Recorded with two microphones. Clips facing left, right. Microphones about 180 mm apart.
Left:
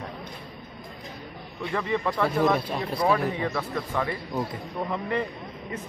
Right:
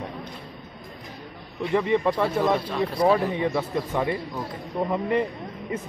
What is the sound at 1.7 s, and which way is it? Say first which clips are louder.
Speech: right 5 dB; 20° right (ahead or behind).